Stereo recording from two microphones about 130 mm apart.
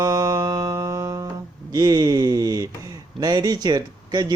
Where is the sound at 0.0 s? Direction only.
30° right (ahead or behind).